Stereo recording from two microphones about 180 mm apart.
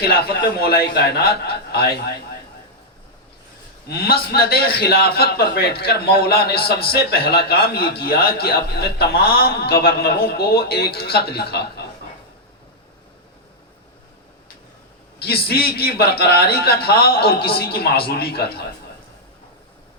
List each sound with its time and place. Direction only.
0.0 s a man's voice: 60° left (ahead or behind)
3.8 s a man's voice: 60° left (ahead or behind)
15.4 s a man's voice: 60° left (ahead or behind)